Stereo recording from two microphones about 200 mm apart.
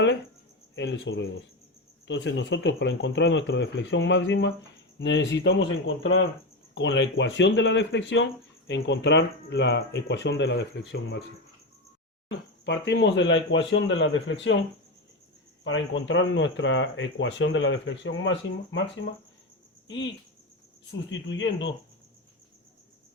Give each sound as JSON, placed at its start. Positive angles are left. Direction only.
{"t": 0.8, "sound": "speech", "side_deg": 65}
{"t": 6.7, "sound": "speech", "side_deg": 65}
{"t": 12.3, "sound": "speech", "side_deg": 60}
{"t": 15.6, "sound": "speech", "side_deg": 70}
{"t": 21.1, "sound": "speech", "side_deg": 65}